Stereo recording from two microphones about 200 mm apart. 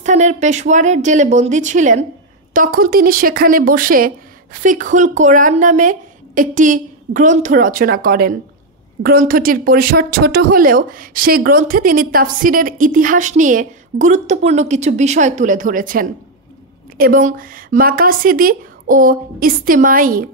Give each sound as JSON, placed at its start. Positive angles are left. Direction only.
{"t": 0.0, "sound": "a woman's voice", "side_deg": -35}